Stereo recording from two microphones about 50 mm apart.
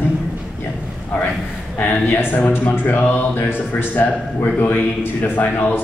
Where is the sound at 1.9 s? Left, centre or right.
Left.